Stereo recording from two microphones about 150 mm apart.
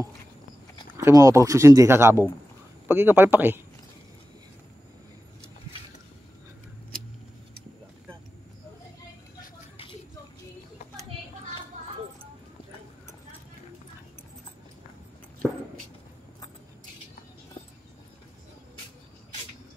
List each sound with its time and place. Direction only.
0.9 s speech: 20° right (ahead or behind)